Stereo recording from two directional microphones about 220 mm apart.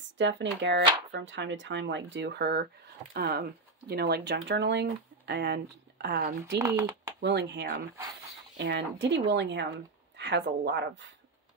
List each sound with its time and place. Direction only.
0.2 s speech: 55° right (ahead or behind)
6.6 s speech: 15° right (ahead or behind)
7.2 s speech: 50° right (ahead or behind)